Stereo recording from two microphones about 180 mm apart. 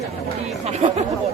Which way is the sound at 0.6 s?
35° right (ahead or behind).